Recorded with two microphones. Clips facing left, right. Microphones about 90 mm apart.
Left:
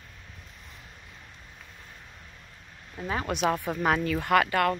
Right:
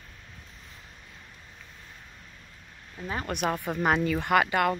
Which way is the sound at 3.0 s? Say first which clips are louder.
Left 3 dB; 10° left (ahead or behind).